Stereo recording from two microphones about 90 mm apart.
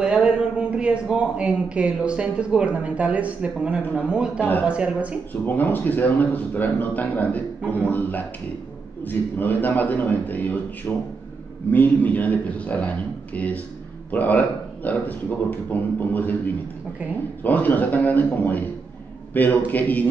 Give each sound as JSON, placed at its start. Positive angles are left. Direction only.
{"t": 0.0, "sound": "speech", "side_deg": -10}
{"t": 4.4, "sound": "a man's voice", "side_deg": 20}
{"t": 4.6, "sound": "speech", "side_deg": -15}
{"t": 5.3, "sound": "a man's voice", "side_deg": 20}